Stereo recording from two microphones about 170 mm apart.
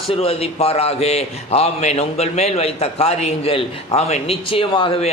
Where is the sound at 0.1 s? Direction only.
35° left (ahead or behind).